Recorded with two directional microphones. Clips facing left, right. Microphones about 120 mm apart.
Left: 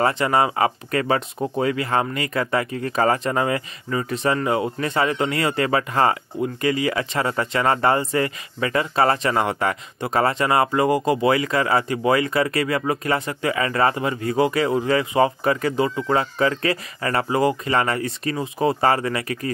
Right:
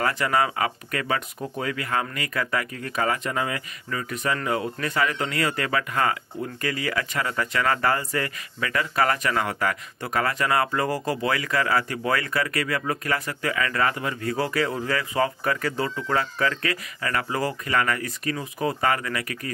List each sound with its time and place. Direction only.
0.0 s speech: 25° left (ahead or behind)